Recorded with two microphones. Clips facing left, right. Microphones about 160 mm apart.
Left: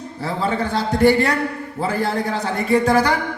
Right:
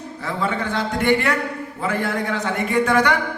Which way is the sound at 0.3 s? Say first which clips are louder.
Left 2 dB; 35° left (ahead or behind).